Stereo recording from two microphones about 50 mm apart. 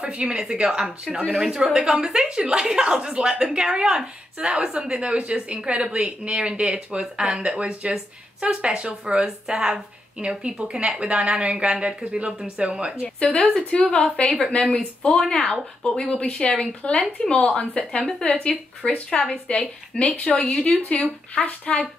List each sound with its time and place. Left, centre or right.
0.0 s speech: centre
13.0 s a woman's voice: left
15.1 s a woman's voice: centre
21.4 s a woman's voice: left